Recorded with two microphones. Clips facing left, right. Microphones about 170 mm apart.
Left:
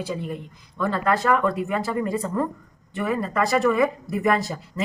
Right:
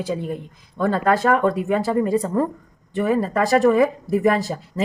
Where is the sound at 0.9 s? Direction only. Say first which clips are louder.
Right 3 dB; 35° right (ahead or behind).